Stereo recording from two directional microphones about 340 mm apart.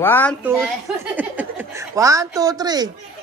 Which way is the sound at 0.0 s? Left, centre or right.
Centre.